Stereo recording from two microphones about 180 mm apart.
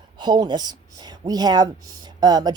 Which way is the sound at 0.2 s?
25° right (ahead or behind).